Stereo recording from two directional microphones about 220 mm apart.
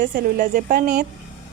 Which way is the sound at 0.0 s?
40° right (ahead or behind).